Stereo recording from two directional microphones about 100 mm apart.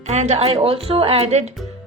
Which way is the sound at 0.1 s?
90° right.